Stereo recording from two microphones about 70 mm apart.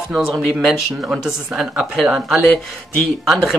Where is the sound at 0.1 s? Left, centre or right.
Centre.